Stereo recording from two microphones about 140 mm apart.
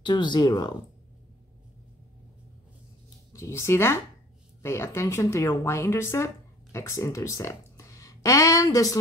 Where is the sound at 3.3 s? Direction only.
20° left (ahead or behind).